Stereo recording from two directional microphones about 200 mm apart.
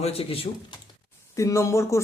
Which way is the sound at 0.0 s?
30° left (ahead or behind).